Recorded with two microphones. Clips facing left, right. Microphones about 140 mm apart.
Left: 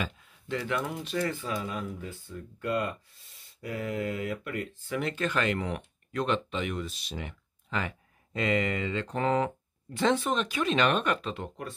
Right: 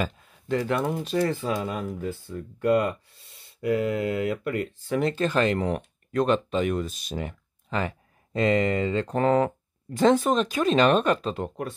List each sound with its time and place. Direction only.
0.0 s speech: 40° right (ahead or behind)
1.9 s speech: 70° right (ahead or behind)
4.6 s speech: 40° right (ahead or behind)